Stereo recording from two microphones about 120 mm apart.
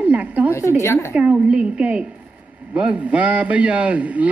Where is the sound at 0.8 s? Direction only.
20° left (ahead or behind).